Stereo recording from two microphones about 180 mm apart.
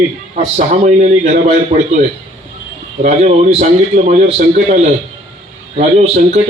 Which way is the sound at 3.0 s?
40° right (ahead or behind).